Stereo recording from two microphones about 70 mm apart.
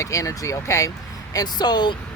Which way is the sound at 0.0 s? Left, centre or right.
Left.